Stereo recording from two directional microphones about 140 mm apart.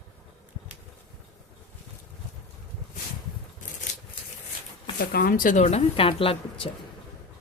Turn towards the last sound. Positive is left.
turn(degrees=40)  # may be behind; listen again after turning